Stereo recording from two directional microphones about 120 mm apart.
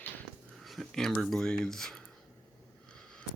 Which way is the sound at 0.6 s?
Centre (ahead or behind).